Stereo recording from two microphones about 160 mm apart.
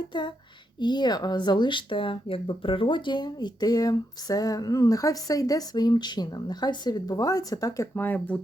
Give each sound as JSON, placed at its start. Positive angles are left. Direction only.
{"t": 0.1, "sound": "speech", "side_deg": 30}